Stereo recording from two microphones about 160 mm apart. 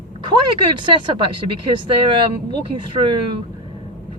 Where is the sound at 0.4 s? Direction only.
30° right (ahead or behind).